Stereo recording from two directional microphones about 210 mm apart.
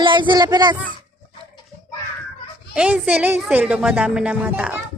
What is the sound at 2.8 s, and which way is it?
Speech, 5° right (ahead or behind).